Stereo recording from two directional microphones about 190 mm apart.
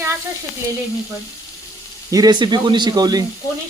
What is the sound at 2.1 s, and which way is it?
Speech, 20° right (ahead or behind).